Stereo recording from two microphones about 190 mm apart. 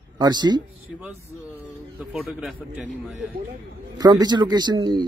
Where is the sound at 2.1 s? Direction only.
Centre (ahead or behind).